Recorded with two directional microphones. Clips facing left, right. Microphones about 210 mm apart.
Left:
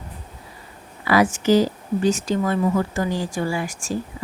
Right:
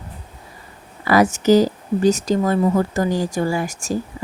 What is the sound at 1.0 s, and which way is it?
Speech, 45° right (ahead or behind).